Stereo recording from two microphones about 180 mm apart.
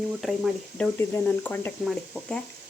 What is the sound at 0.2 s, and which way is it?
Speech, centre (ahead or behind).